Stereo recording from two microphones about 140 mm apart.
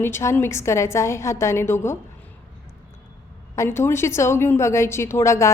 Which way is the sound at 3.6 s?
20° left (ahead or behind).